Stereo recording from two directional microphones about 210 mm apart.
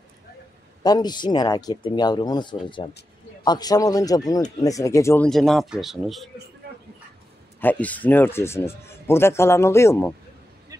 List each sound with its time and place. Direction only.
0.8 s speech: 20° left (ahead or behind); by 6.3 s centre (ahead or behind)
7.6 s speech: 5° left (ahead or behind)
10.7 s a sound: 15° right (ahead or behind)